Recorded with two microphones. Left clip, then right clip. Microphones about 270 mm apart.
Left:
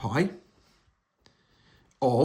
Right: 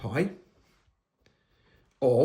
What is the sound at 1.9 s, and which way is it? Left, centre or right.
Speech, centre.